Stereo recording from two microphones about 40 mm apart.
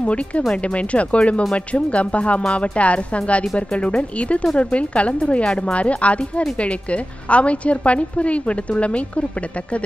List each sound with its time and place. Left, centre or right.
0.0 s a woman's voice: left